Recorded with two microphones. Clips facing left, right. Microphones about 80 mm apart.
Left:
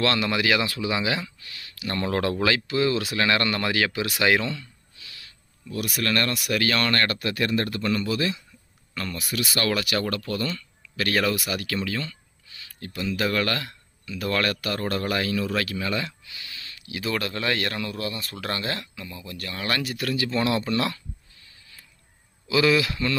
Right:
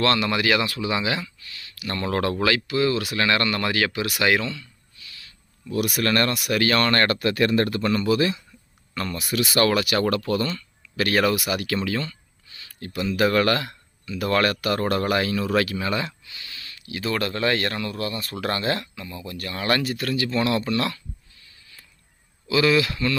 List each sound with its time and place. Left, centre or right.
0.0 s speech: centre
5.6 s speech: centre
6.3 s speech: centre
6.9 s speech: right
7.2 s a man's voice: right
8.0 s speech: centre
10.1 s speech: right
12.9 s speech: centre
13.2 s speech: right
16.2 s a sound: centre
16.6 s a sound: centre
17.0 s speech: centre
22.4 s speech: centre